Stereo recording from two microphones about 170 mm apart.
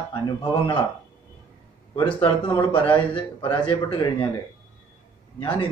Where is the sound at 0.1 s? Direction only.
25° left (ahead or behind).